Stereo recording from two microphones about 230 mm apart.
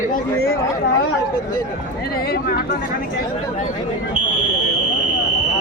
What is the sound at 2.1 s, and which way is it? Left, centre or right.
Speech, left.